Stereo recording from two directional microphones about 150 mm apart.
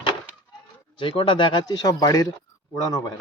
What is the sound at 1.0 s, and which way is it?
Speech, 35° left (ahead or behind).